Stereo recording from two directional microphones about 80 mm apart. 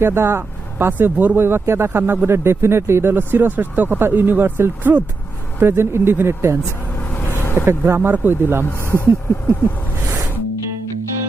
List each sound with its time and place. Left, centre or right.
0.0 s speech: right
6.7 s vehicle: left
7.6 s speech: right
8.6 s speech: left